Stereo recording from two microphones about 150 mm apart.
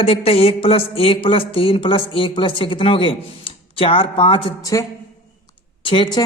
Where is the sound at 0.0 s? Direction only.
40° left (ahead or behind).